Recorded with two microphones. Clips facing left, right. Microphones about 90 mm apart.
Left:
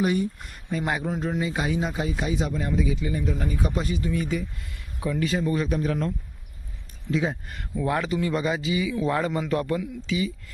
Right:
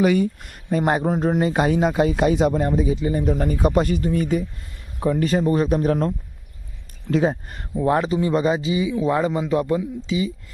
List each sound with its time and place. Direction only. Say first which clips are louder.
0.0 s speech: right 6 dB; 90° right
0.7 s speech: right 7 dB; 45° right (ahead or behind); by 10.3 s 25° right (ahead or behind)